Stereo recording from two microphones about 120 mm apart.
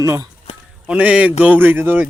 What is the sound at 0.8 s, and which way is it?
Speech, 10° right (ahead or behind).